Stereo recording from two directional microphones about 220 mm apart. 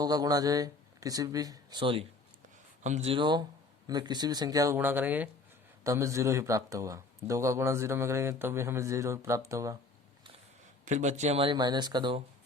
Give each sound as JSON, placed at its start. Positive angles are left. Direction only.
{"t": 0.0, "sound": "speech", "side_deg": -15}
{"t": 10.8, "sound": "speech", "side_deg": -35}